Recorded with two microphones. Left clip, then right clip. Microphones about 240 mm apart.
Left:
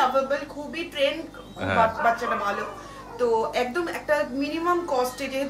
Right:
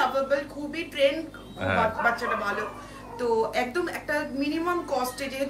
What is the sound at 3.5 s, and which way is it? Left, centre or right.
A man's voice, centre.